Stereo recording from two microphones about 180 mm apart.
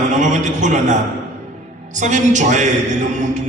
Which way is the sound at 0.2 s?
40° right (ahead or behind).